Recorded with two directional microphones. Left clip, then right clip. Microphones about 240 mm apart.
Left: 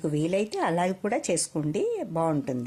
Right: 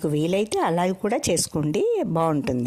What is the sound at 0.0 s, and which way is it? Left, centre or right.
Speech, right.